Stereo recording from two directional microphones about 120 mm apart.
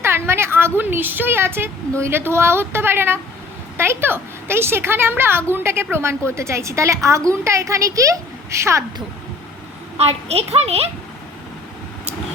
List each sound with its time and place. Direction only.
0.0 s a sound: 20° right (ahead or behind)
0.8 s a woman's voice: 15° right (ahead or behind)
10.0 s a child's voice: 60° right (ahead or behind)